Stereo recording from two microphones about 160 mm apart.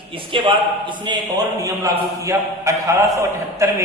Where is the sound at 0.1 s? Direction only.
30° right (ahead or behind).